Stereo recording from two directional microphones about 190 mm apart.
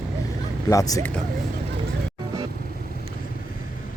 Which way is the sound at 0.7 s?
20° left (ahead or behind).